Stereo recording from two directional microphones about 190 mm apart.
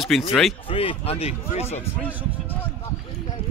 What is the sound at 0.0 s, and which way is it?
Speech, centre (ahead or behind).